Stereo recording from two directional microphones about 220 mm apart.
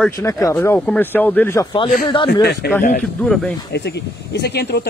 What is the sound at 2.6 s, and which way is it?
Speech, 45° left (ahead or behind).